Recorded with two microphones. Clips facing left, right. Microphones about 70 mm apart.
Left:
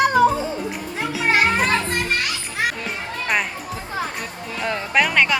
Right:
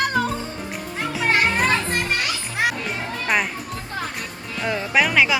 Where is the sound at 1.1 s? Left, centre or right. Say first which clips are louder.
Left 2 dB; centre.